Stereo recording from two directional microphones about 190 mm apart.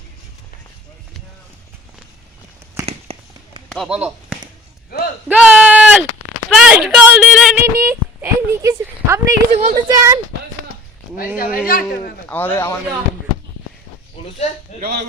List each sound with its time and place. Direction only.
2.8 s firecracker: 30° right (ahead or behind)
3.7 s speech: centre (ahead or behind)
5.3 s a sound: 5° right (ahead or behind)
7.8 s a sound: 15° right (ahead or behind)
9.6 s a child's voice: 35° right (ahead or behind)
9.9 s speech: 15° right (ahead or behind)
11.5 s a woman's voice: 50° left (ahead or behind)
12.3 s speech: 10° left (ahead or behind)
14.7 s speech: 35° left (ahead or behind)